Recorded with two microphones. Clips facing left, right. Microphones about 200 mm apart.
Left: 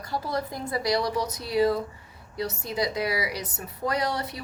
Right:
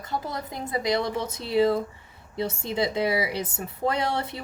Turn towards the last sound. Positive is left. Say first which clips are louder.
# right 1 dB
turn(degrees=-25)  # may be behind; listen again after turning